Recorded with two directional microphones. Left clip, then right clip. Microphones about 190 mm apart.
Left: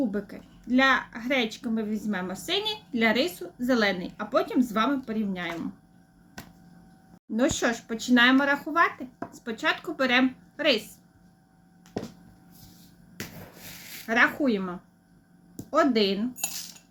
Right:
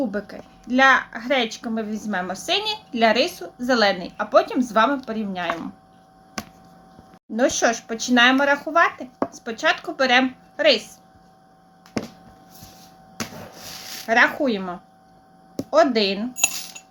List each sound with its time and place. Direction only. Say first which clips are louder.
0.1 s speech: right 5 dB; 25° left (ahead or behind)
7.3 s speech: right 6 dB; 25° left (ahead or behind)
14.1 s speech: right 5 dB; 25° left (ahead or behind)
16.3 s cutlery: right 11 dB; centre (ahead or behind)